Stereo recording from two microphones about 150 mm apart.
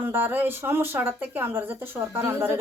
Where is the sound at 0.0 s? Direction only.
15° right (ahead or behind).